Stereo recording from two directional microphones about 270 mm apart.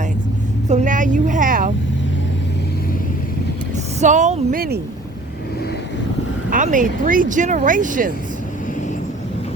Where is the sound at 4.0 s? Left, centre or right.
Right.